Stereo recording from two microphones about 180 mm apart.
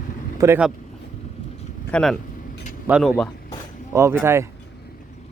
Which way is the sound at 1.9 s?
5° left (ahead or behind).